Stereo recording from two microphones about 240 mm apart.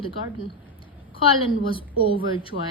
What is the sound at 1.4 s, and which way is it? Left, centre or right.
A woman's voice, left.